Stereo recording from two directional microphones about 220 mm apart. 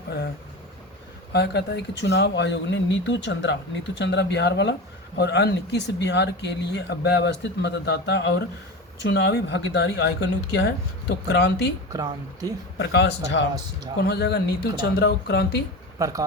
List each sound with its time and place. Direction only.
1.3 s speech: 50° left (ahead or behind)
11.9 s speech: 15° right (ahead or behind)
12.8 s speech: 50° left (ahead or behind)
16.0 s speech: 15° right (ahead or behind)